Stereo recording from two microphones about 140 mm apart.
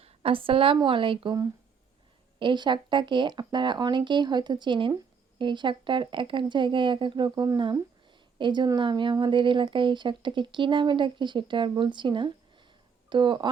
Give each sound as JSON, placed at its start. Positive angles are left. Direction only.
{"t": 0.0, "sound": "a woman's voice", "side_deg": -40}
{"t": 2.4, "sound": "speech", "side_deg": -35}